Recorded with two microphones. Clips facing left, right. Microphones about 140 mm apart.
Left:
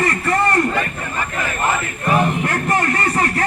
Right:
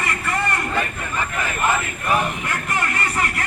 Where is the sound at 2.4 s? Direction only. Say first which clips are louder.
Left 6 dB; 45° left (ahead or behind).